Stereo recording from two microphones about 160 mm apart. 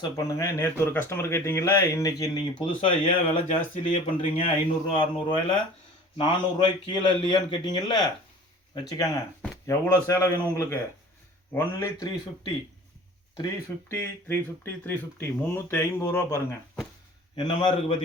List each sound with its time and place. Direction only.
0.2 s speech: 20° left (ahead or behind)
13.3 s speech: 20° left (ahead or behind)
17.3 s speech: 30° left (ahead or behind)